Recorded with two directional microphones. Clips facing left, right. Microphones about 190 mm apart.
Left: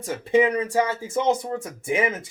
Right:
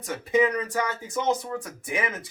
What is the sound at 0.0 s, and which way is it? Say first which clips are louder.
Speech: left 3 dB; 30° left (ahead or behind).